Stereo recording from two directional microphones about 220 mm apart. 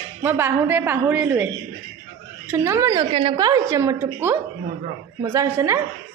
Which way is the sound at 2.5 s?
15° right (ahead or behind).